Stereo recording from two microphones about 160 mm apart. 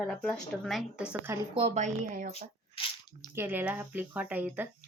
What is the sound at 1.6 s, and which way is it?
Speech, 40° right (ahead or behind).